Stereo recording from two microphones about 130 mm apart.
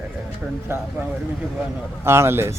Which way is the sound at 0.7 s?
20° right (ahead or behind).